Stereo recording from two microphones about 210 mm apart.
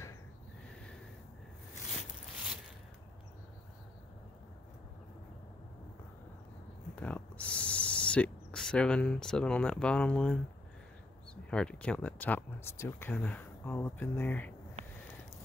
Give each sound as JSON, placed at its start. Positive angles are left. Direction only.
{"t": 7.0, "sound": "speech", "side_deg": 5}
{"t": 11.5, "sound": "speech", "side_deg": 5}